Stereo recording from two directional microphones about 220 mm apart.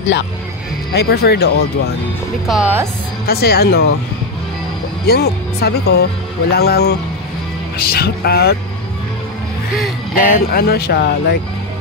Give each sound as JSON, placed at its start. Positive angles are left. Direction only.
{"t": 0.9, "sound": "speech", "side_deg": 45}
{"t": 2.4, "sound": "speech", "side_deg": -5}
{"t": 3.3, "sound": "speech", "side_deg": 45}
{"t": 5.0, "sound": "speech", "side_deg": 45}
{"t": 10.1, "sound": "speech", "side_deg": 40}